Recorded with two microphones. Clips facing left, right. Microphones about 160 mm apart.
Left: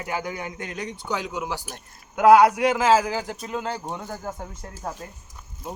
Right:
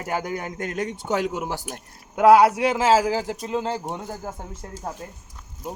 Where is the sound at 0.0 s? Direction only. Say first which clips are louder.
Right 2 dB; 45° right (ahead or behind).